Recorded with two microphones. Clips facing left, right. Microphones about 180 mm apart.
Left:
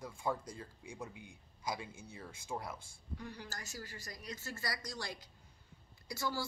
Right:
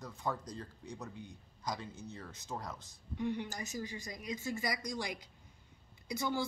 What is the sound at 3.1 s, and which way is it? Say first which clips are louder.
A woman's voice: right 10 dB; 20° right (ahead or behind).